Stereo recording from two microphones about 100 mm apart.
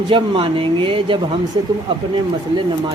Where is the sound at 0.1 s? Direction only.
60° right (ahead or behind).